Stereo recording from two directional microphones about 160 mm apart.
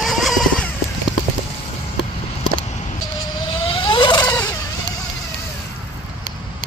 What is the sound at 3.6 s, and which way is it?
Vehicle, 30° left (ahead or behind).